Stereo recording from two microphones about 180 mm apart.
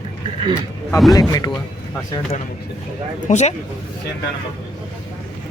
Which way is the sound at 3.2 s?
40° left (ahead or behind).